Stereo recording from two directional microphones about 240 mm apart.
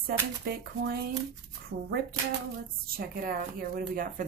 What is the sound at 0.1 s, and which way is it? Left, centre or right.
A woman's voice, right.